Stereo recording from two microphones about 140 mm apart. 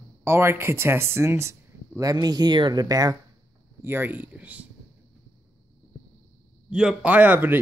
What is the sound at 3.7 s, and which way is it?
Speech, 15° right (ahead or behind).